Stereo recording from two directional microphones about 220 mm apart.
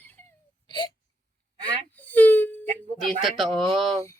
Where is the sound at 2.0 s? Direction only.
10° left (ahead or behind).